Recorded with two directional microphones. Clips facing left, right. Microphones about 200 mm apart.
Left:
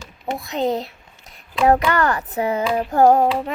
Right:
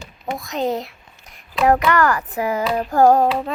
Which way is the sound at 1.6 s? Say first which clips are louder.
Even; 30° left (ahead or behind).